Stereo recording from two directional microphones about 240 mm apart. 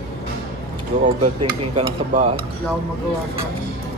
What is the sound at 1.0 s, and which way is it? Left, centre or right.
Cutlery, right.